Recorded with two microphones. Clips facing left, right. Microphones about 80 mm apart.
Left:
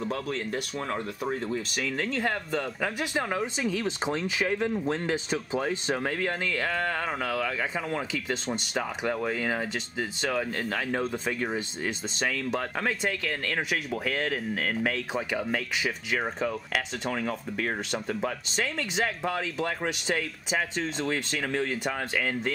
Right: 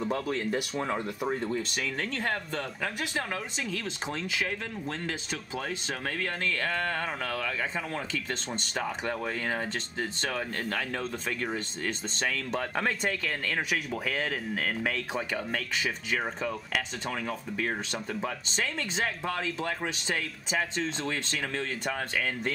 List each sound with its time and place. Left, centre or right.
0.0 s speech: centre
2.8 s speech: centre